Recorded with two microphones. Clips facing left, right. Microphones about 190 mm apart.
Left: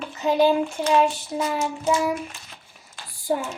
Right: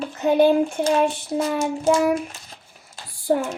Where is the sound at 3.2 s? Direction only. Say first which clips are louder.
Right 4 dB; 55° right (ahead or behind).